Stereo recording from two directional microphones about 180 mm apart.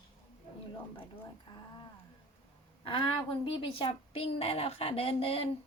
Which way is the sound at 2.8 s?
30° left (ahead or behind).